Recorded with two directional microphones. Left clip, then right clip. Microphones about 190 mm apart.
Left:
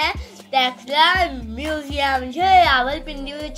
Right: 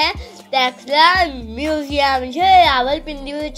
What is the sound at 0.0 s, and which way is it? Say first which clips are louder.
A child's voice: right 3 dB; 25° right (ahead or behind).